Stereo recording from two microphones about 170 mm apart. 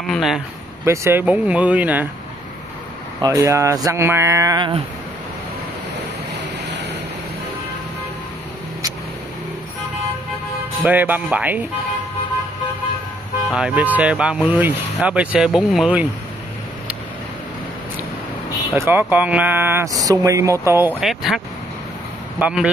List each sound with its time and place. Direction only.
0.1 s speech: centre (ahead or behind)
0.8 s speech: 15° right (ahead or behind)
3.2 s speech: 20° right (ahead or behind)
10.8 s speech: 10° right (ahead or behind)
13.5 s speech: 5° right (ahead or behind)
18.8 s speech: 15° right (ahead or behind)
21.0 s speech: centre (ahead or behind)
22.4 s speech: 5° right (ahead or behind)